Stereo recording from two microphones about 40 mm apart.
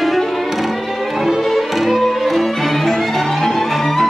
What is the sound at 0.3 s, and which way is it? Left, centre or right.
Music, centre.